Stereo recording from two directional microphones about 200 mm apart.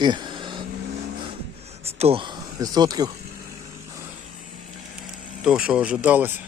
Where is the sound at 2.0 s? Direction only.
30° right (ahead or behind).